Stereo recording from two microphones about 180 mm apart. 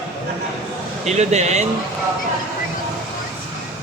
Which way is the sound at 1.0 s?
40° right (ahead or behind).